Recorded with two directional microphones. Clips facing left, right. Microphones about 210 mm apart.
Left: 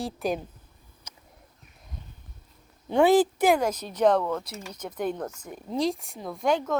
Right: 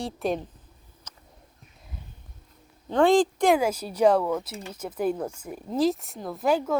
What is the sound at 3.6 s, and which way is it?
Speech, 10° right (ahead or behind).